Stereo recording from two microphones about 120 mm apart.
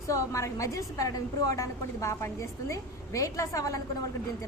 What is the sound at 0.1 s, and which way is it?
A woman's voice, 25° left (ahead or behind).